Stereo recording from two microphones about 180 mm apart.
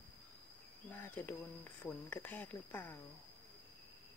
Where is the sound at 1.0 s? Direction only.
10° left (ahead or behind).